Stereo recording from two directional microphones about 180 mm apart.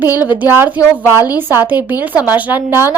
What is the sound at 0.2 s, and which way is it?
A woman's voice, 10° right (ahead or behind).